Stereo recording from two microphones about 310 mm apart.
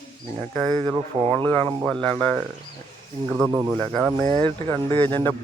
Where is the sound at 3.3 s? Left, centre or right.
Centre.